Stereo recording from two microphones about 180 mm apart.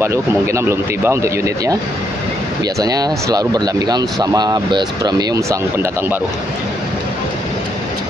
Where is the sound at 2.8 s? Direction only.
20° right (ahead or behind).